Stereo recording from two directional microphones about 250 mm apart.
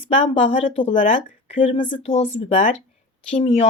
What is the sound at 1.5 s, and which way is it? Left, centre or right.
Speech, centre.